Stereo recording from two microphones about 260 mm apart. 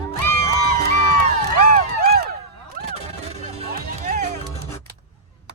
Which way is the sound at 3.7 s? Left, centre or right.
Right.